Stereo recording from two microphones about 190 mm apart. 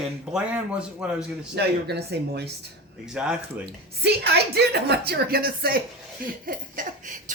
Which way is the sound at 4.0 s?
60° right (ahead or behind).